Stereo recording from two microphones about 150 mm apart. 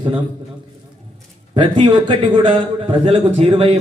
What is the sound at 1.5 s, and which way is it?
A man's voice, 30° right (ahead or behind).